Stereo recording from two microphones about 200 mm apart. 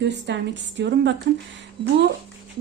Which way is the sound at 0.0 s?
60° right (ahead or behind).